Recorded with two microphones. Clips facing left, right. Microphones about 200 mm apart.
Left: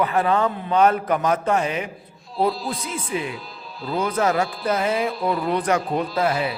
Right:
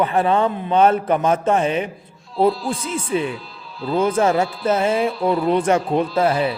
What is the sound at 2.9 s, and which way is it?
A man's voice, 30° right (ahead or behind).